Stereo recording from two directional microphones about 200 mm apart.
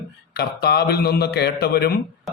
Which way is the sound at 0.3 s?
50° left (ahead or behind).